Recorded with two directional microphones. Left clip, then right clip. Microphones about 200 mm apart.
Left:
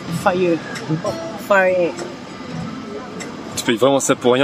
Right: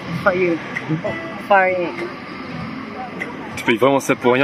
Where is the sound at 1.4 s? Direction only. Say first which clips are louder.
Even; 60° left (ahead or behind).